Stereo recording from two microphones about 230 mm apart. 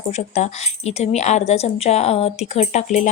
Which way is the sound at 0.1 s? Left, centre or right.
Left.